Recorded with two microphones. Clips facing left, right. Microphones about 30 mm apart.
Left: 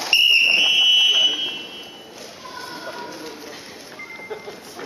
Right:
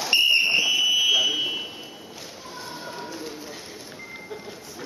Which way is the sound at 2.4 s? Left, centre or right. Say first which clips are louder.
Left 4 dB; left.